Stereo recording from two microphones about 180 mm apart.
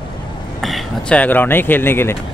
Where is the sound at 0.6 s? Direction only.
Centre (ahead or behind).